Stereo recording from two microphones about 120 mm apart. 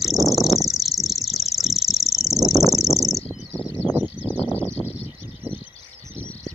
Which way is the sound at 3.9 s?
15° right (ahead or behind).